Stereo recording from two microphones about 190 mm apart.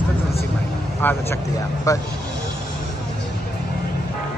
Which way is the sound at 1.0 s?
10° left (ahead or behind).